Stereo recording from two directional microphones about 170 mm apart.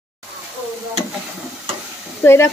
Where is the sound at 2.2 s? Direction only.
15° left (ahead or behind).